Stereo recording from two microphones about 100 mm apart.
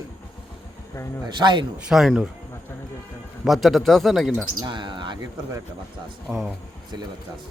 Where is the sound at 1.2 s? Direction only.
45° right (ahead or behind).